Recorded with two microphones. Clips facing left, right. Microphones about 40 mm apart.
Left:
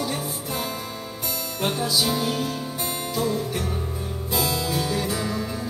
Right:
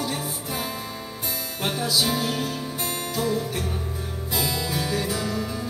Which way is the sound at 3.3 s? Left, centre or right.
Centre.